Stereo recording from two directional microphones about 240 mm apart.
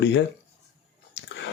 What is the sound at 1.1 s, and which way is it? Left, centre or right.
Chewing, left.